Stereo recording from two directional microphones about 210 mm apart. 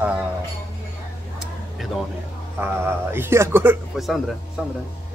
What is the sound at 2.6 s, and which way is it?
Speech, 10° right (ahead or behind).